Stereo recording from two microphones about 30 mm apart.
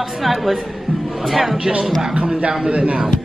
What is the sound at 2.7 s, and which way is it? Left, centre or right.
Speech, right.